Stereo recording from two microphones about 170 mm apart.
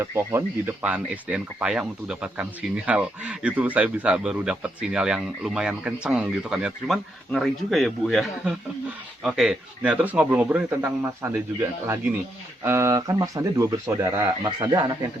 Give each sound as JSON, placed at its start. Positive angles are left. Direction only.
{"t": 0.0, "sound": "speech", "side_deg": -15}
{"t": 12.6, "sound": "speech", "side_deg": -15}